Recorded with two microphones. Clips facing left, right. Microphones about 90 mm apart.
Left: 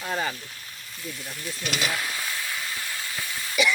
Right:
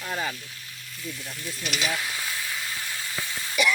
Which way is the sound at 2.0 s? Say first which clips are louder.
Left 1 dB; 15° left (ahead or behind).